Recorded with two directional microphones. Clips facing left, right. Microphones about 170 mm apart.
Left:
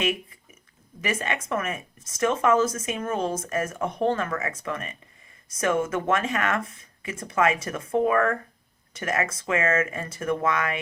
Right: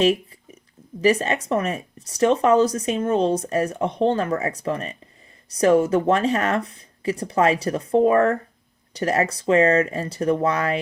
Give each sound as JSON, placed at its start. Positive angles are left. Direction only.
{"t": 1.0, "sound": "speech", "side_deg": -35}